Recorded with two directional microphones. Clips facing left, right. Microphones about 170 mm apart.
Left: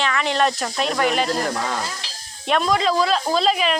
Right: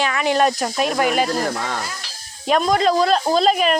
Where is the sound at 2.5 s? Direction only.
40° right (ahead or behind).